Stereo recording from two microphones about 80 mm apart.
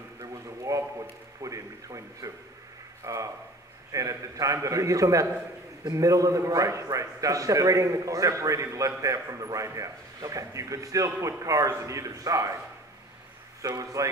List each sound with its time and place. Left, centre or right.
0.2 s a sound: right
3.0 s a man's voice: right
13.7 s a man's voice: right